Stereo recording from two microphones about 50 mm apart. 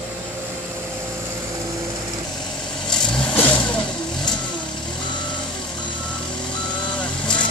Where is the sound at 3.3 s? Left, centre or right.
Left.